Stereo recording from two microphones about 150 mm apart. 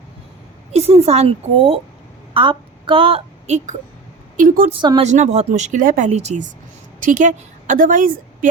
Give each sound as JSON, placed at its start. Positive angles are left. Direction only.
{"t": 0.7, "sound": "a woman's voice", "side_deg": -45}
{"t": 4.4, "sound": "speech", "side_deg": -65}
{"t": 4.7, "sound": "speech", "side_deg": -35}
{"t": 5.0, "sound": "a woman's voice", "side_deg": -50}
{"t": 6.1, "sound": "a woman's voice", "side_deg": -50}